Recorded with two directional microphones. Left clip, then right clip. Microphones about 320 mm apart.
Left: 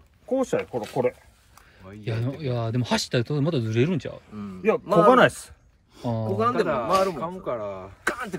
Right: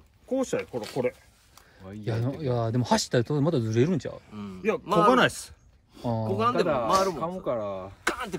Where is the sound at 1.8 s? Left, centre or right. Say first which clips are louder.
Right 1 dB; right.